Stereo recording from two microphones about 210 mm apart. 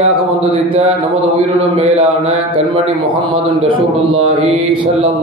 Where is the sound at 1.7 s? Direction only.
25° right (ahead or behind).